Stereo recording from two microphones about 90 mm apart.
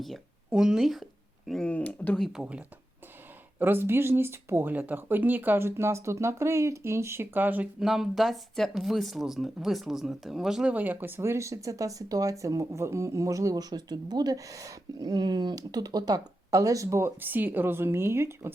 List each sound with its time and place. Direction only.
0.0 s speech: 5° right (ahead or behind)
1.5 s speech: 10° left (ahead or behind)
2.3 s speech: 10° right (ahead or behind)
3.6 s speech: 25° right (ahead or behind)
7.8 s speech: 5° right (ahead or behind); by 17.1 s 35° right (ahead or behind)
17.2 s speech: 20° right (ahead or behind)